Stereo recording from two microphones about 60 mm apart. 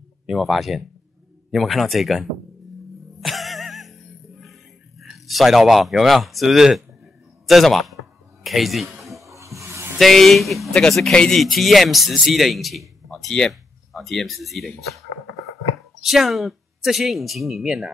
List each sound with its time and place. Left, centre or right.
0.3 s a man's voice: centre
3.2 s music: centre
5.1 s a man's voice: centre
9.0 s a sound: centre
9.3 s a sound: right
9.9 s a man's voice: centre
16.0 s a man's voice: centre